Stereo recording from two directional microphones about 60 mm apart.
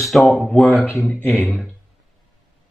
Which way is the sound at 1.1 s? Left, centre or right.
Left.